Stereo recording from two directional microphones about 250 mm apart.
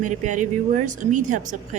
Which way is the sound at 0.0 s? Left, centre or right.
Right.